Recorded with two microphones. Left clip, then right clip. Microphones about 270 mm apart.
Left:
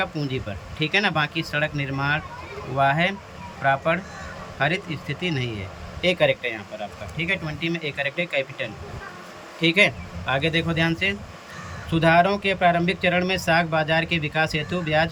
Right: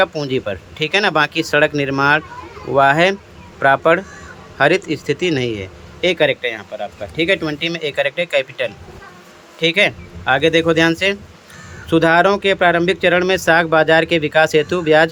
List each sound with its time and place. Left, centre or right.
0.0 s speech: centre